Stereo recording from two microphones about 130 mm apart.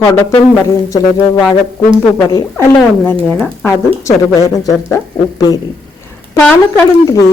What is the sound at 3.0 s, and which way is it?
Speech, 15° left (ahead or behind).